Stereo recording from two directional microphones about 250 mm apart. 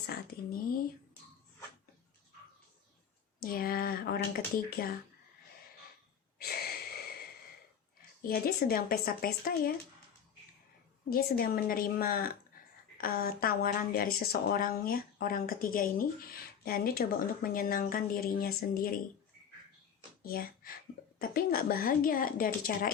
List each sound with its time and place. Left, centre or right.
3.4 s a woman's voice: left
6.4 s wheeze: left
8.2 s a woman's voice: left
11.1 s a woman's voice: left
20.2 s a child's voice: left